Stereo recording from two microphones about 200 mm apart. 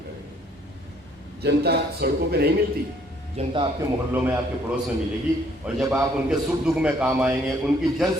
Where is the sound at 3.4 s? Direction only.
25° right (ahead or behind).